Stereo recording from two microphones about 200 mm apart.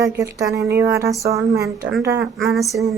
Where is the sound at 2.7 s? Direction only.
15° right (ahead or behind).